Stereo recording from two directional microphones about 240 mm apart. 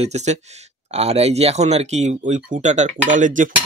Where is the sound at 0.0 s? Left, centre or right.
Right.